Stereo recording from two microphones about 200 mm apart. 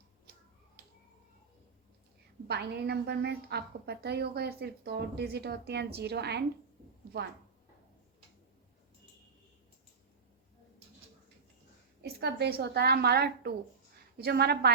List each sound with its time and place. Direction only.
2.5 s a woman's voice: 55° right (ahead or behind)
12.0 s a woman's voice: 55° right (ahead or behind)